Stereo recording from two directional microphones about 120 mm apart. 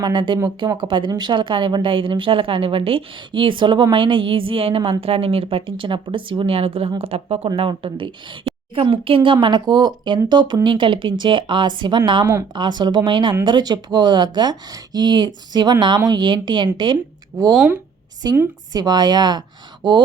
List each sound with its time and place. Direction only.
0.0 s a woman's voice: 40° right (ahead or behind)